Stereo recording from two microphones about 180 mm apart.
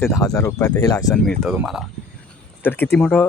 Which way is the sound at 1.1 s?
Centre (ahead or behind).